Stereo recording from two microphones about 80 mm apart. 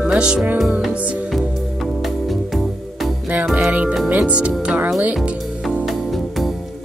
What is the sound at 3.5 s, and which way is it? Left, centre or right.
Speech, centre.